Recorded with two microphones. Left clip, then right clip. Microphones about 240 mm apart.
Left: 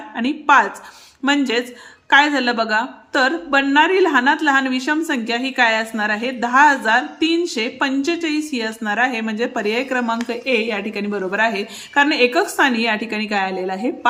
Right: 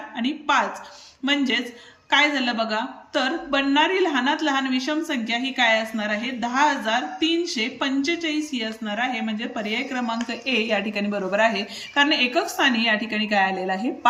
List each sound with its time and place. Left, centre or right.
0.2 s a woman's voice: centre